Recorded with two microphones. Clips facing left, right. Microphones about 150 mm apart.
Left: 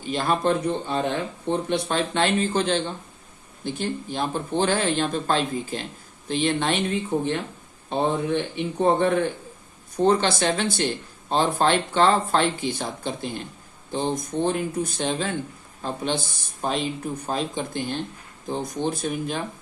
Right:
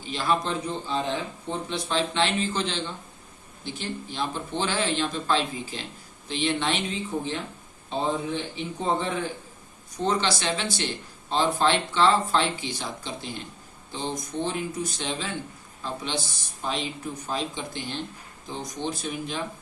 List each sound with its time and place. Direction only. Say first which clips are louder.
0.0 s speech: left 3 dB; 50° left (ahead or behind)